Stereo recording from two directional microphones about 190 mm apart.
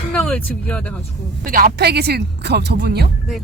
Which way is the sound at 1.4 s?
50° right (ahead or behind).